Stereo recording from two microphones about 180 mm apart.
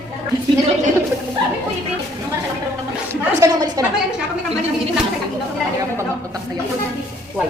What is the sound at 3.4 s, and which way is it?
Speech, 15° right (ahead or behind).